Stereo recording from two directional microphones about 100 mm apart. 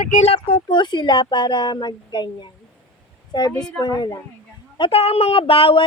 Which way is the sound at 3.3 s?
45° left (ahead or behind).